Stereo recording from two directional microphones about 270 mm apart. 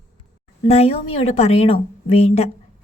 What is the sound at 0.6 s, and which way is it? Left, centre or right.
A woman's voice, left.